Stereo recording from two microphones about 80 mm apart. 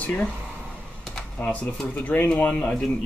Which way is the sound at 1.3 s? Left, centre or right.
Centre.